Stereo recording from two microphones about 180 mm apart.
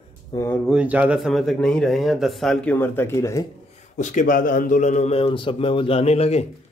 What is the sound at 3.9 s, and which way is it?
Speech, 45° left (ahead or behind).